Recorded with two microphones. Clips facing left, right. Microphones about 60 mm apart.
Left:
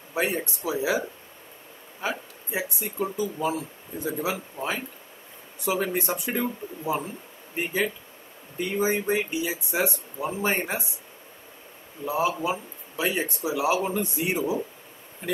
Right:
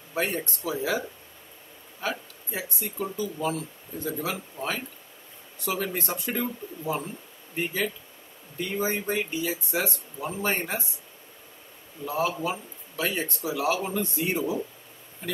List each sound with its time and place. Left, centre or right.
0.1 s speech: centre
2.0 s a sound: centre
3.0 s speech: centre
12.0 s speech: centre